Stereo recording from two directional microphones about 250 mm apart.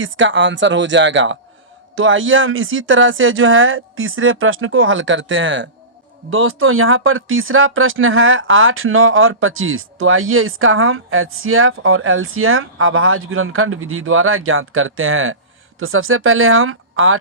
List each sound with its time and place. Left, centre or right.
0.0 s speech: right